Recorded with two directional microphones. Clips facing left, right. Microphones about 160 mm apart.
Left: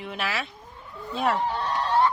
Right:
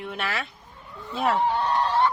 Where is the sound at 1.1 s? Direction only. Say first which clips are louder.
Right 2 dB; centre (ahead or behind).